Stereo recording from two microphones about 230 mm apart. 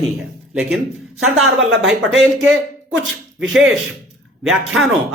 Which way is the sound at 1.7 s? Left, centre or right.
Right.